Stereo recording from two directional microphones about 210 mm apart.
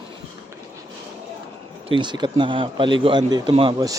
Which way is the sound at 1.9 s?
20° right (ahead or behind).